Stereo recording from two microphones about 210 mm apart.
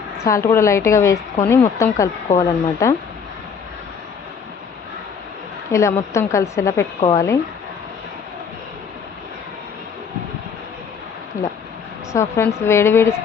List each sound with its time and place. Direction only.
0.2 s a woman's voice: 15° left (ahead or behind)
5.7 s a woman's voice: 15° left (ahead or behind)
12.1 s a woman's voice: 15° left (ahead or behind)